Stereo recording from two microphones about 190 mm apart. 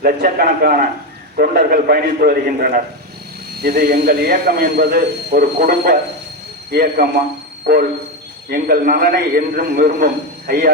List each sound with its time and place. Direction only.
0.0 s a man's voice: 55° right (ahead or behind)